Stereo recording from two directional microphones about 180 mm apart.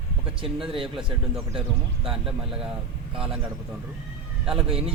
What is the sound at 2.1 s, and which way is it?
Speech, 5° right (ahead or behind).